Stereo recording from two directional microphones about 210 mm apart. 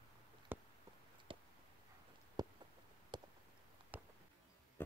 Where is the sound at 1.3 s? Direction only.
25° right (ahead or behind).